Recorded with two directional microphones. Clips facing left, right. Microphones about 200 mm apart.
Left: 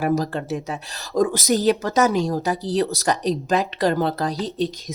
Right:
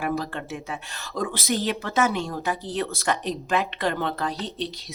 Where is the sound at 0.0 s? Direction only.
40° left (ahead or behind).